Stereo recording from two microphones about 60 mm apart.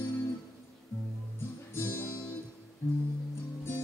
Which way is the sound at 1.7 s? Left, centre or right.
Left.